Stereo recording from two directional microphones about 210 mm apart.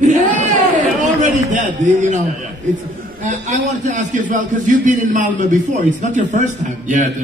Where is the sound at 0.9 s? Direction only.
35° right (ahead or behind).